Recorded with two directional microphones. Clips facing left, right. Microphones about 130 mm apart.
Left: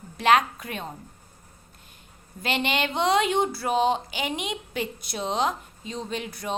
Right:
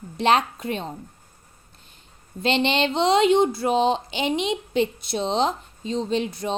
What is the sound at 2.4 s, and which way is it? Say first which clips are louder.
Speech: right 5 dB; 25° right (ahead or behind).